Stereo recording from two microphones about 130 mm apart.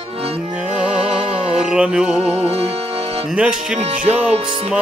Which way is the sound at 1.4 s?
5° right (ahead or behind).